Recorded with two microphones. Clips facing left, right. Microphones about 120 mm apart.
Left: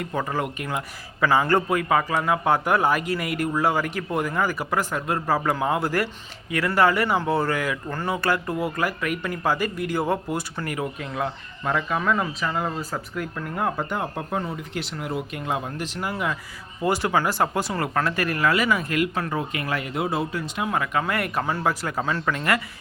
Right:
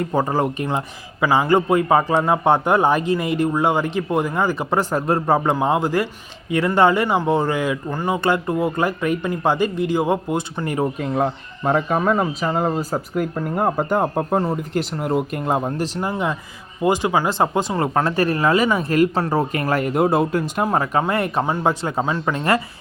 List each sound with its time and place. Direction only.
0.0 s speech: 30° right (ahead or behind)
1.2 s speech: 15° right (ahead or behind)
10.8 s speech: 40° right (ahead or behind)
16.0 s speech: 25° right (ahead or behind)